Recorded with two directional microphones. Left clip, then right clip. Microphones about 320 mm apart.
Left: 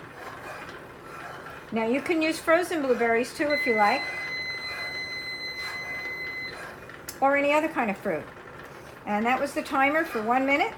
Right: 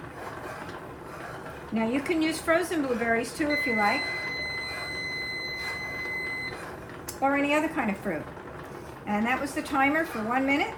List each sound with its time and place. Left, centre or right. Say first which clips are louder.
1.7 s speech: left 2 dB; centre
7.2 s speech: left 3 dB; centre